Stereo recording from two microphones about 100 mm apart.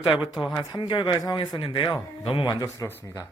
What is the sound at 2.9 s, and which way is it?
Speech, 20° left (ahead or behind).